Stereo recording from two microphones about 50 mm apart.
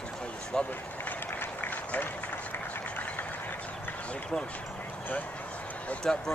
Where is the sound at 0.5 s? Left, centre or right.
Centre.